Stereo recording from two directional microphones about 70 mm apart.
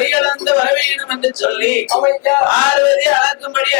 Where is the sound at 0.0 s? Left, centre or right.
Left.